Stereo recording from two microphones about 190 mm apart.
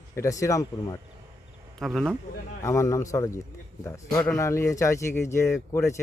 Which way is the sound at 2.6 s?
15° left (ahead or behind).